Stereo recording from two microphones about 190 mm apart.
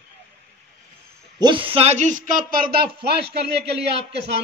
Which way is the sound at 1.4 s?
25° right (ahead or behind).